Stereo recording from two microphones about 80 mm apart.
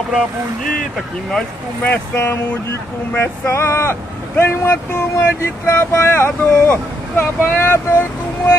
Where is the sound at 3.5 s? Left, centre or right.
Left.